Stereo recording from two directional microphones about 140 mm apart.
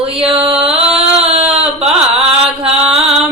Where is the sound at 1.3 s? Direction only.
50° right (ahead or behind).